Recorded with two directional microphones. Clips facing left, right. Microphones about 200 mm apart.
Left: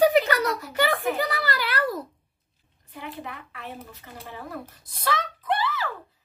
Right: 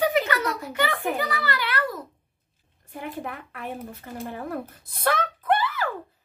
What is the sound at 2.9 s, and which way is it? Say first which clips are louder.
A woman's voice: right 4 dB; 50° right (ahead or behind).